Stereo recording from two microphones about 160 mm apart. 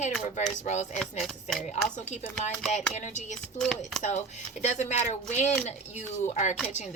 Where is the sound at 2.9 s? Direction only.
45° left (ahead or behind).